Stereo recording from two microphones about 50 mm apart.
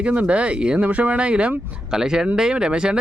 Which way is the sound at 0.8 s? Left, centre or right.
Right.